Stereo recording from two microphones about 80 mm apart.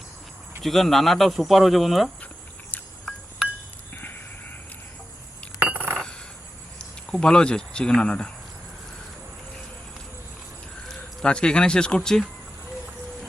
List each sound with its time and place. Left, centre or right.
0.6 s speech: centre
3.9 s a sound: left
5.6 s coin: right
7.1 s speech: centre
10.8 s speech: centre